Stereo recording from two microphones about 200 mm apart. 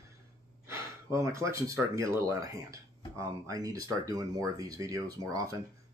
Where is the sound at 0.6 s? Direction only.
15° right (ahead or behind).